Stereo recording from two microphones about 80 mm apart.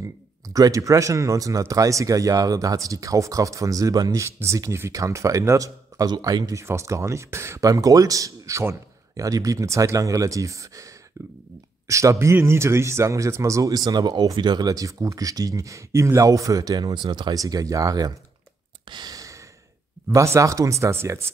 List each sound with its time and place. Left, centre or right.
0.0 s speech: right
6.6 s speech: right
17.4 s speech: right
18.9 s sigh: right
19.1 s sigh: right
20.1 s speech: right